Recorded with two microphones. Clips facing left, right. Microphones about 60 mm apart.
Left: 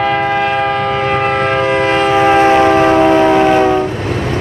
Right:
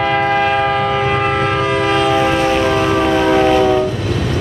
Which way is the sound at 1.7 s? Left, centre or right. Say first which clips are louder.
Left 2 dB; left.